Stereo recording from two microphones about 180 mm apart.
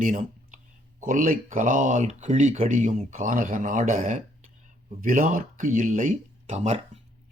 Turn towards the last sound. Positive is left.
turn(degrees=-40)  # may be behind; listen again after turning